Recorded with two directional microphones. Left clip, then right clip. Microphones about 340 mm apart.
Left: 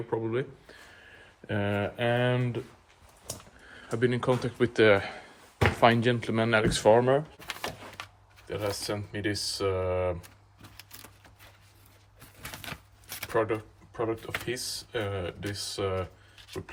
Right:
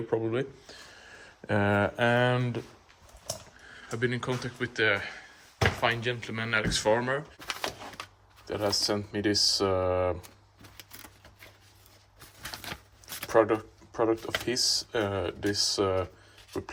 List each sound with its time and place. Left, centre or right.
0.1 s speech: centre
3.7 s speech: centre
7.3 s a sound: centre
8.4 s speech: centre
12.4 s a sound: centre
13.2 s speech: centre